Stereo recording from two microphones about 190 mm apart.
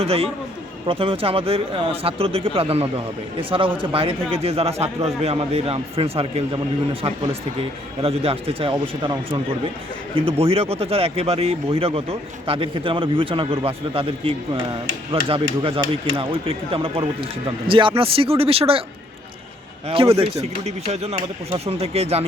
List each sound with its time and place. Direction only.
0.0 s speech: 30° right (ahead or behind)
8.0 s speech: 30° right (ahead or behind)
19.9 s speech: 30° right (ahead or behind)